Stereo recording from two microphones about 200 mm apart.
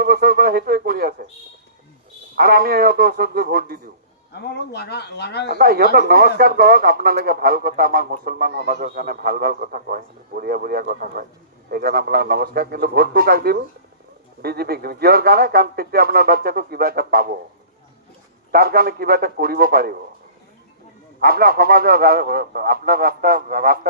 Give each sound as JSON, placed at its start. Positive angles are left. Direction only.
{"t": 0.0, "sound": "speech", "side_deg": -50}
{"t": 2.3, "sound": "speech", "side_deg": -50}
{"t": 4.4, "sound": "speech", "side_deg": 55}
{"t": 5.5, "sound": "speech", "side_deg": -50}
{"t": 18.5, "sound": "speech", "side_deg": -50}
{"t": 21.2, "sound": "speech", "side_deg": -50}